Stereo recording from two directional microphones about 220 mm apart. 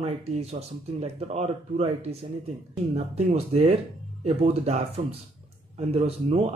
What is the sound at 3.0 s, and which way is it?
Speech, 30° right (ahead or behind).